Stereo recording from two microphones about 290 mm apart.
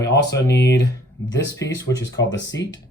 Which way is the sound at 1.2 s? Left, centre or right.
Left.